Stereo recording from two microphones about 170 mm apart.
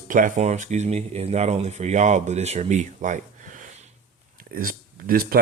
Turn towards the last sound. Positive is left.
turn(degrees=-60)  # may be behind; listen again after turning